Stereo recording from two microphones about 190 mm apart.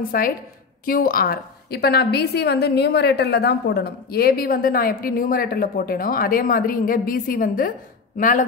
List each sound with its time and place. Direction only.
0.1 s a woman's voice: 50° left (ahead or behind)